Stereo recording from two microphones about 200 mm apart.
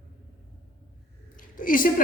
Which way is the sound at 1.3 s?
45° left (ahead or behind).